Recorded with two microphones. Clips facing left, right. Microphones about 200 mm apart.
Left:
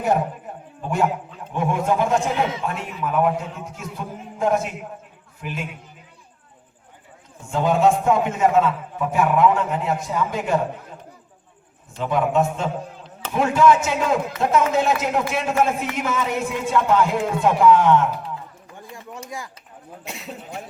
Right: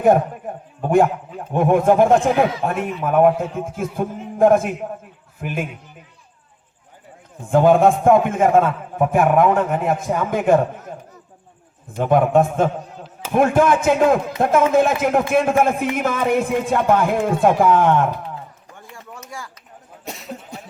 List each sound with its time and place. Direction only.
0.8 s a man's voice: 55° right (ahead or behind)
7.5 s a man's voice: 55° right (ahead or behind)
11.9 s a man's voice: 50° right (ahead or behind)
19.3 s speech: 20° left (ahead or behind)
20.1 s speech: 40° right (ahead or behind)